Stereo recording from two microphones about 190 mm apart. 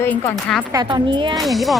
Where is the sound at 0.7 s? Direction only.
25° right (ahead or behind).